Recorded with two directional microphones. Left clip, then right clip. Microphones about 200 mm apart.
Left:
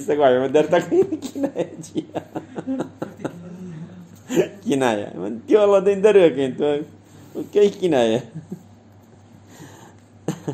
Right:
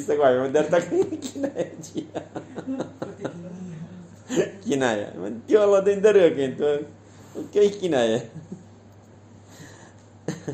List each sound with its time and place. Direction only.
0.0 s a man's voice: 15° left (ahead or behind)
10.2 s cough: 15° left (ahead or behind)